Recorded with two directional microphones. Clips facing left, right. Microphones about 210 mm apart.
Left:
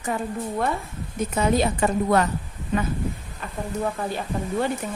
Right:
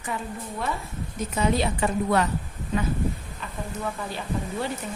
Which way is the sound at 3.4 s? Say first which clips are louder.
Left 4 dB; 45° left (ahead or behind).